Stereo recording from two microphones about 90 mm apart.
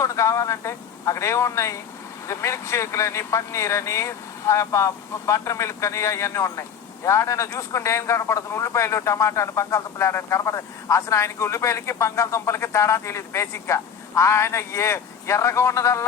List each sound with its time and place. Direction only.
0.0 s speech: 35° left (ahead or behind)